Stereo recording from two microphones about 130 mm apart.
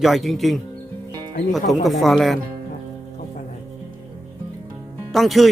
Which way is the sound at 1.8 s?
Centre (ahead or behind).